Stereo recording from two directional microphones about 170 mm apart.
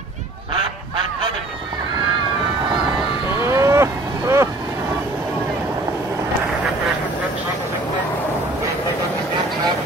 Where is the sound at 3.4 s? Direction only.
15° right (ahead or behind).